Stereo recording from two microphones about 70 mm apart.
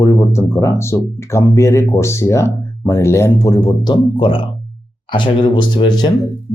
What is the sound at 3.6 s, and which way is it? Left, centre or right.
Speech, left.